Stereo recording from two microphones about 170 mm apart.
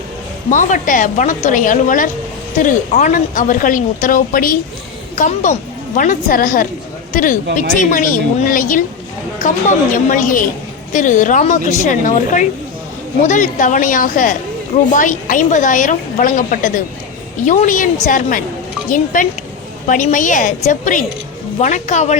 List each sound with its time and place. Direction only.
0.5 s a woman's voice: 50° left (ahead or behind)